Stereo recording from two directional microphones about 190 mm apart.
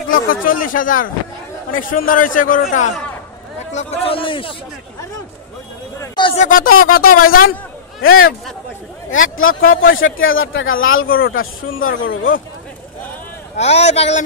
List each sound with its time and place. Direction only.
0.1 s speech: 45° left (ahead or behind)
3.7 s speech: 30° left (ahead or behind)
5.9 s a sound: 25° left (ahead or behind)
6.3 s speech: 45° left (ahead or behind)
8.0 s a man's voice: 90° left
13.6 s speech: 35° left (ahead or behind)